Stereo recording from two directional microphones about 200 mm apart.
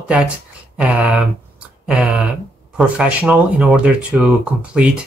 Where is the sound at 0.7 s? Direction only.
5° right (ahead or behind).